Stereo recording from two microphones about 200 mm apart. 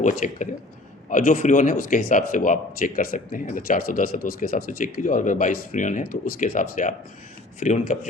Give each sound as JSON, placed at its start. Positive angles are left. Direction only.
{"t": 0.0, "sound": "a man's voice", "side_deg": 40}